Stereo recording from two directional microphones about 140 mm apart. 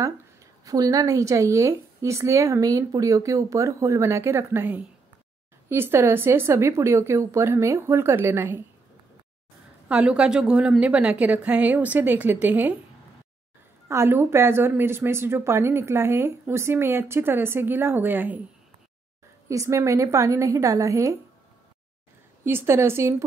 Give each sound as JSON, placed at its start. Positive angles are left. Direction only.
{"t": 0.7, "sound": "speech", "side_deg": -25}
{"t": 9.8, "sound": "speech", "side_deg": -10}
{"t": 13.8, "sound": "speech", "side_deg": -20}
{"t": 19.5, "sound": "speech", "side_deg": -20}
{"t": 22.4, "sound": "speech", "side_deg": -15}